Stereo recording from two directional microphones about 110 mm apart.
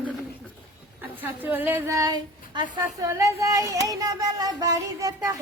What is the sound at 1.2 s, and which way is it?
Speech, 15° right (ahead or behind).